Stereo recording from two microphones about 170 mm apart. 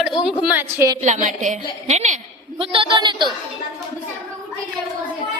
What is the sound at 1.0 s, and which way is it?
A woman's voice, 45° right (ahead or behind).